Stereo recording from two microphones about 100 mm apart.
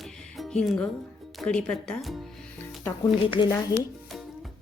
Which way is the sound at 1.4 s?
10° left (ahead or behind).